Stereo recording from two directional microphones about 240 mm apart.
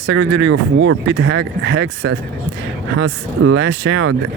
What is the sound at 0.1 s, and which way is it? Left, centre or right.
Speech, right.